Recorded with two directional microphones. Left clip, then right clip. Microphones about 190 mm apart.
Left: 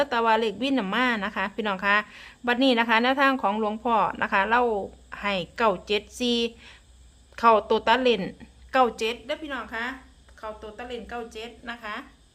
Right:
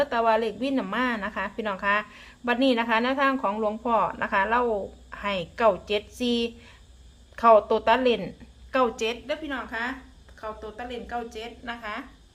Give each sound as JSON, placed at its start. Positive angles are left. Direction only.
{"t": 0.0, "sound": "a woman's voice", "side_deg": 25}